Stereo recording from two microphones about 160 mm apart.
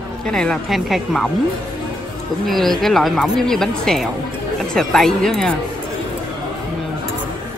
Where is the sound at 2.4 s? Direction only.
Centre (ahead or behind).